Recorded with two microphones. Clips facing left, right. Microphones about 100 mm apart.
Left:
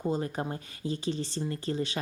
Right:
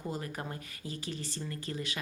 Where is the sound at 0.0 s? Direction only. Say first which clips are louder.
Left 7 dB; 25° left (ahead or behind).